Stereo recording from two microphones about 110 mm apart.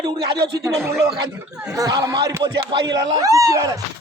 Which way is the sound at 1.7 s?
30° right (ahead or behind).